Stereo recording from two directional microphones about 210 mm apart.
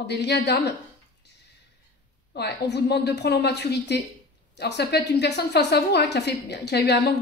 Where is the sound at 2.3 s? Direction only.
50° left (ahead or behind).